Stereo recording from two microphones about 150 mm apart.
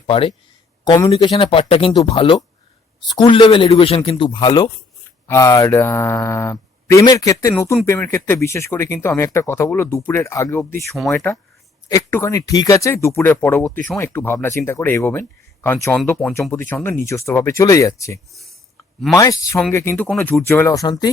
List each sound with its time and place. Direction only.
0.1 s a man's voice: 40° left (ahead or behind)
0.9 s a man's voice: 25° left (ahead or behind)
18.3 s speech: centre (ahead or behind)
19.1 s speech: 20° left (ahead or behind)